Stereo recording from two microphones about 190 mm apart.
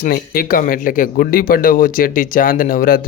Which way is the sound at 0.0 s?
50° left (ahead or behind).